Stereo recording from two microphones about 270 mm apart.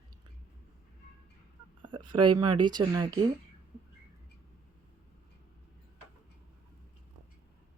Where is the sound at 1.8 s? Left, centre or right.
Centre.